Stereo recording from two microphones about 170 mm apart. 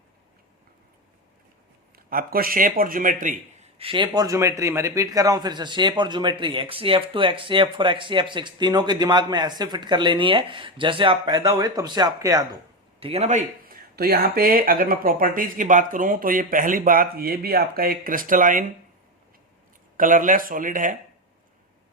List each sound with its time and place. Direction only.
2.0 s speech: 60° right (ahead or behind)
3.8 s a man's voice: 30° right (ahead or behind)
13.0 s a man's voice: 35° right (ahead or behind)
13.9 s speech: 65° right (ahead or behind)
20.0 s speech: 50° right (ahead or behind)